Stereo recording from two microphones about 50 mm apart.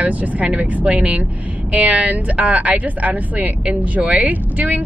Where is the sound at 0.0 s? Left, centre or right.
Right.